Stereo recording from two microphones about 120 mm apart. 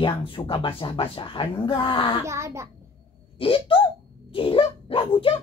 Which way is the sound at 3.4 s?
45° left (ahead or behind).